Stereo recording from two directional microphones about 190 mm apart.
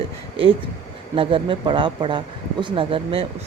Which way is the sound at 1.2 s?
30° right (ahead or behind).